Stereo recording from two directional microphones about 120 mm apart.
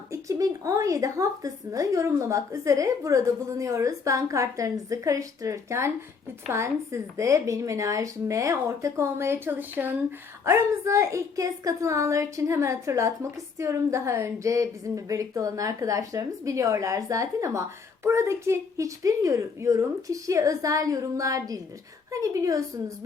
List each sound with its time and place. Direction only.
0.1 s a woman's voice: 30° right (ahead or behind)